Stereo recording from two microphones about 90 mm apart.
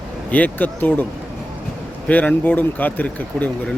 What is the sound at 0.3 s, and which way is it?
Speech, 20° left (ahead or behind).